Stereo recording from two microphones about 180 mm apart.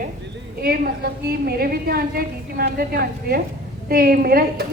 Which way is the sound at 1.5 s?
60° right (ahead or behind).